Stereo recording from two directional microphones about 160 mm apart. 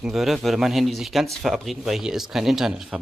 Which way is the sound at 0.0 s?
Centre (ahead or behind).